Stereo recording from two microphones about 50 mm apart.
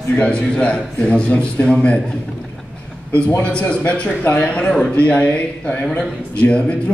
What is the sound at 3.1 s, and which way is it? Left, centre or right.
A man's voice, left.